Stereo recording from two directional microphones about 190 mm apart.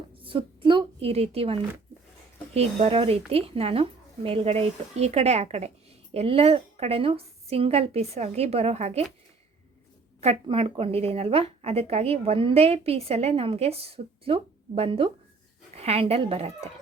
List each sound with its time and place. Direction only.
0.2 s a woman's voice: 25° right (ahead or behind)
10.2 s a woman's voice: 30° right (ahead or behind)